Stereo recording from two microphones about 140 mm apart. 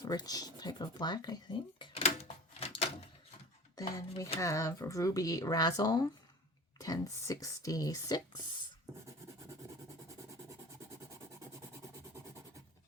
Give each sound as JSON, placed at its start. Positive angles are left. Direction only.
{"t": 0.0, "sound": "speech", "side_deg": 30}
{"t": 1.9, "sound": "a sound", "side_deg": 45}
{"t": 3.8, "sound": "speech", "side_deg": 25}